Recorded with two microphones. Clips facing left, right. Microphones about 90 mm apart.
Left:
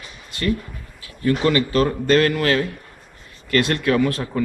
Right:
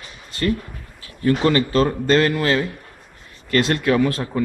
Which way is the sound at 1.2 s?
30° right (ahead or behind).